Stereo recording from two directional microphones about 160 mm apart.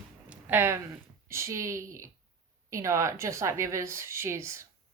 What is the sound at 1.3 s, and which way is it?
A woman's voice, 15° right (ahead or behind).